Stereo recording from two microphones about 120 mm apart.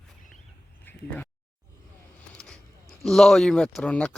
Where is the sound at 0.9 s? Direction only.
15° left (ahead or behind).